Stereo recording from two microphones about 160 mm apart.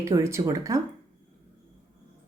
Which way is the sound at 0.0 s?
15° right (ahead or behind).